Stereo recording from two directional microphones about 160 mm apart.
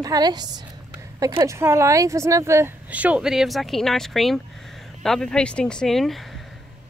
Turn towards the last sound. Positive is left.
turn(degrees=0)  # may be behind; listen again after turning